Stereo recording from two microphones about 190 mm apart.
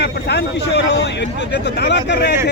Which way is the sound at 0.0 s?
65° left (ahead or behind).